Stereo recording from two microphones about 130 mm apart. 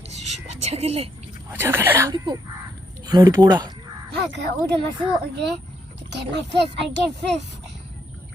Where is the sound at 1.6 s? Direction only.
20° right (ahead or behind).